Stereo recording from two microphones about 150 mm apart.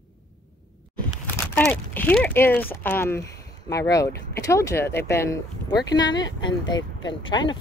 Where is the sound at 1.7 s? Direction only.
10° left (ahead or behind).